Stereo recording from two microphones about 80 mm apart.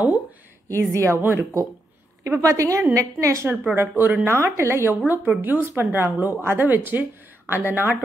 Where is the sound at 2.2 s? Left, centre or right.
Right.